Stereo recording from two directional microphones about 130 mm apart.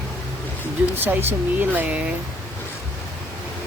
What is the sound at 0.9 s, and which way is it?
Speech, 15° right (ahead or behind).